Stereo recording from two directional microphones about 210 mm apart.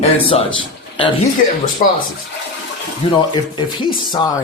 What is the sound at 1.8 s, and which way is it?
Speech, 40° left (ahead or behind).